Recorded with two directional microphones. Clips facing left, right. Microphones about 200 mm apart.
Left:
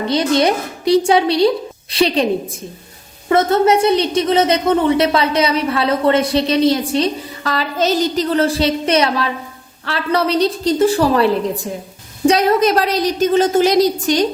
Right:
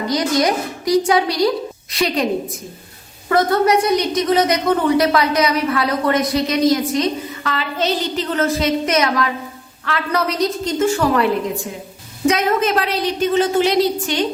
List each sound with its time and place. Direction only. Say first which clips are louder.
0.1 s a woman's voice: left 3 dB; 30° left (ahead or behind)
3.2 s a woman's voice: left 2 dB; 25° left (ahead or behind); by 14.3 s 40° left (ahead or behind)